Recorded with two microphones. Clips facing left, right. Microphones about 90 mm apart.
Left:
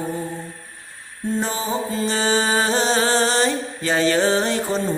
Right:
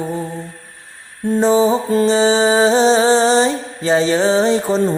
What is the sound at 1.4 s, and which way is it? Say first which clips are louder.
Music: right 11 dB; 25° right (ahead or behind).